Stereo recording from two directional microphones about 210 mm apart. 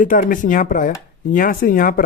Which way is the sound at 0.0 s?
40° left (ahead or behind).